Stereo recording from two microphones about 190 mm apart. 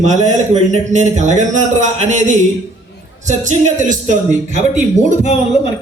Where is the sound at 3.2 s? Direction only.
40° right (ahead or behind).